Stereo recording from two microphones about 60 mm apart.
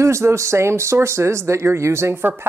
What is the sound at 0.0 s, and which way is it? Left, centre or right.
Speech, right.